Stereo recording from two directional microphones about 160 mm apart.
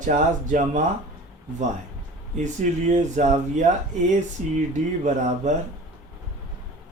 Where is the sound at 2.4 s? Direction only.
50° right (ahead or behind).